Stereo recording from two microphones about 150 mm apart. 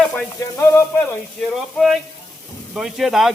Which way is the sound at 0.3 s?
20° left (ahead or behind).